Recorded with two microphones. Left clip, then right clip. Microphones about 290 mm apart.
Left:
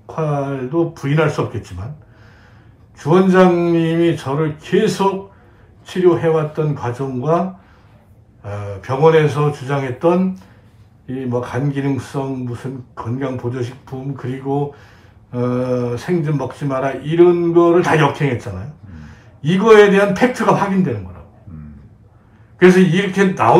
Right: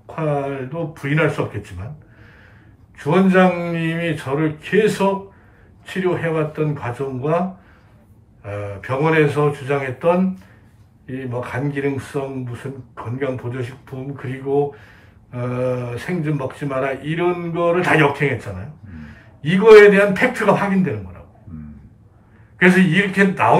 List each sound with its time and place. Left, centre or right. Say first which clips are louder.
0.1 s speech: left 1 dB; centre
3.0 s speech: left 3 dB; centre
5.9 s speech: left 7 dB; centre
8.5 s speech: left 1 dB; centre
11.3 s speech: left 3 dB; centre
14.5 s speech: right 2 dB; left
15.3 s speech: left 3 dB; centre
21.5 s a sound: right 2 dB; centre
22.6 s speech: left 3 dB; centre